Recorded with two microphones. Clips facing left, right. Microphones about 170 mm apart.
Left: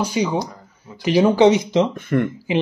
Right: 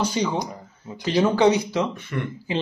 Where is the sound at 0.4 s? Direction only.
20° right (ahead or behind).